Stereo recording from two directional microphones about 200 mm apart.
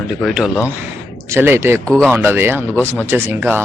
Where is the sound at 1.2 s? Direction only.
10° right (ahead or behind).